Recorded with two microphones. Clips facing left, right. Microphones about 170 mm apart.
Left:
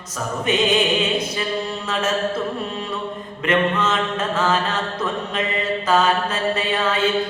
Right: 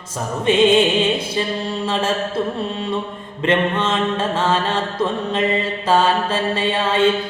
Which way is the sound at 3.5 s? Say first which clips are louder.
Right 1 dB; 30° right (ahead or behind).